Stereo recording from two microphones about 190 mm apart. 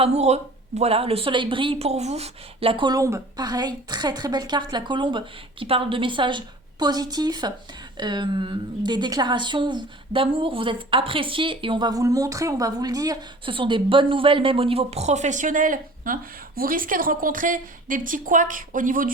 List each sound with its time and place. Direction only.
0.0 s a woman's voice: 35° right (ahead or behind)